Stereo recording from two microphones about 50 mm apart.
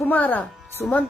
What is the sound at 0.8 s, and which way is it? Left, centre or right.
Speech, left.